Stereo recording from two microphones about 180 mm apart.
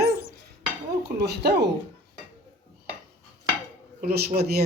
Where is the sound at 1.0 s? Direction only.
65° right (ahead or behind).